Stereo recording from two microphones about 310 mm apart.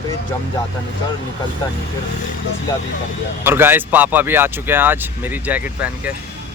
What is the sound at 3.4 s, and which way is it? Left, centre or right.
Speech, centre.